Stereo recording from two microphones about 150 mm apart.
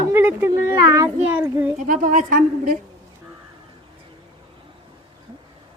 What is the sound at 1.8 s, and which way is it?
A woman's voice, 60° right (ahead or behind).